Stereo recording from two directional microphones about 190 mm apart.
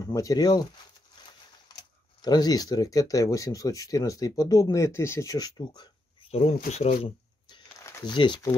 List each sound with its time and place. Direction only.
0.0 s speech: 20° left (ahead or behind)
2.2 s speech: 20° left (ahead or behind)
6.3 s speech: 35° left (ahead or behind)
7.0 s a sound: 25° left (ahead or behind)
7.8 s speech: 20° left (ahead or behind)